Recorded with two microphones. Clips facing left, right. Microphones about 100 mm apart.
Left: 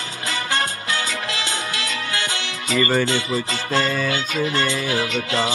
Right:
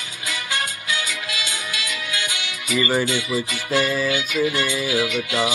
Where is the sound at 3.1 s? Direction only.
50° left (ahead or behind).